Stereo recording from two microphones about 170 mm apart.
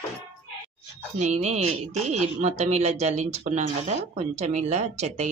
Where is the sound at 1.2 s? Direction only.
40° right (ahead or behind).